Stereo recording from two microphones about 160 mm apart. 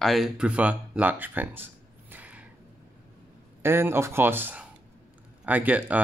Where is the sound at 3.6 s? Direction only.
15° right (ahead or behind).